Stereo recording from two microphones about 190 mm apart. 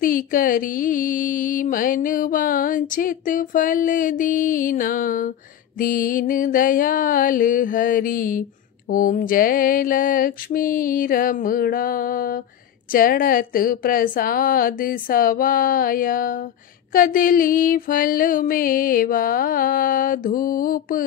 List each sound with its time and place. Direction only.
0.0 s music: 45° left (ahead or behind)